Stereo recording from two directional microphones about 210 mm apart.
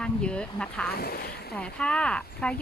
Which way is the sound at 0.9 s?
45° left (ahead or behind).